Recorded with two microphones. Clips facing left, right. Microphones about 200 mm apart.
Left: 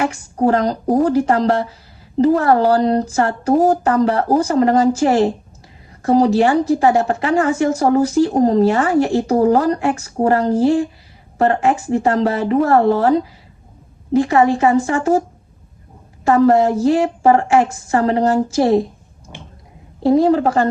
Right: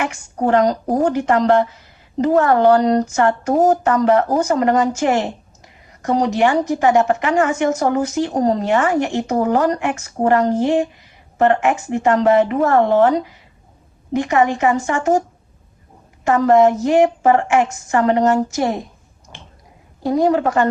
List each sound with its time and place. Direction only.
0.0 s speech: 35° left (ahead or behind)
16.2 s speech: 35° left (ahead or behind)
20.0 s speech: 30° left (ahead or behind)